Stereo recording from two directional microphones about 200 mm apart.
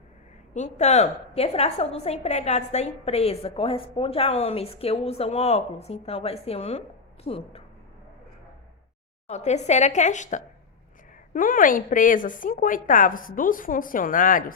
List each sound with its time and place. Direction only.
0.5 s a woman's voice: 35° left (ahead or behind)
9.2 s a woman's voice: 35° left (ahead or behind)